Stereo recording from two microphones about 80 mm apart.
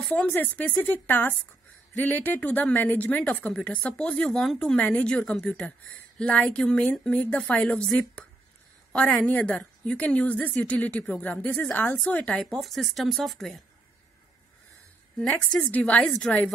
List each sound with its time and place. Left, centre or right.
0.0 s speech: centre
12.5 s speech: centre
15.1 s speech: centre